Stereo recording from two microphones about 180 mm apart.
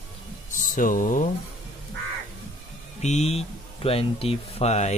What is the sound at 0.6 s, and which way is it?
Speech, 50° left (ahead or behind).